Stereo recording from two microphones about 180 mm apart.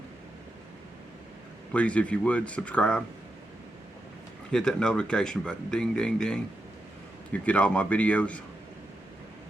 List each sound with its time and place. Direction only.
1.7 s speech: 5° left (ahead or behind)
4.5 s speech: 5° left (ahead or behind)
7.4 s speech: 5° left (ahead or behind)